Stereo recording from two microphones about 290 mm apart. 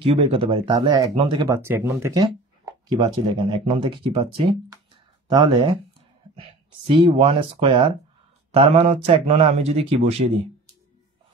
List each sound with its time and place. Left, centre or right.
0.0 s speech: centre
6.9 s speech: centre